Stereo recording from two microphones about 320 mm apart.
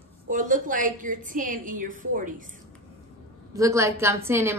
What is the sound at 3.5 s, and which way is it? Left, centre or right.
A woman's voice, centre.